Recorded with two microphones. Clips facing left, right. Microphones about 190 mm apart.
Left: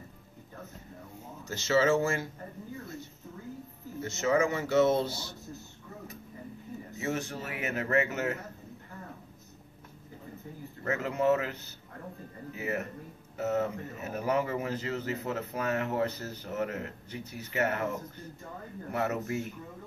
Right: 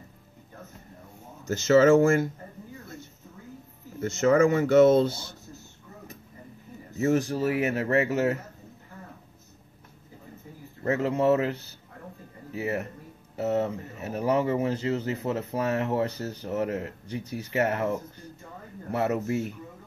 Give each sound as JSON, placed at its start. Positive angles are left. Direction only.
{"t": 1.5, "sound": "speech", "side_deg": -45}
{"t": 4.0, "sound": "speech", "side_deg": -50}
{"t": 7.0, "sound": "speech", "side_deg": -40}
{"t": 10.8, "sound": "speech", "side_deg": -30}
{"t": 18.9, "sound": "speech", "side_deg": -35}